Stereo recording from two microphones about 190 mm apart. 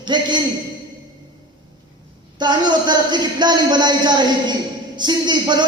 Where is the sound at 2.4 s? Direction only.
25° right (ahead or behind).